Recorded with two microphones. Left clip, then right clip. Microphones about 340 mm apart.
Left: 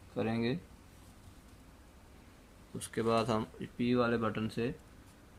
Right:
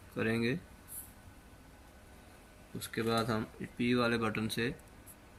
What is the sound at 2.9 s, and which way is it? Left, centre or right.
Speech, left.